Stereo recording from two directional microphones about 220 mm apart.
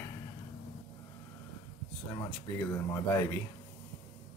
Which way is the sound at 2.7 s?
10° left (ahead or behind).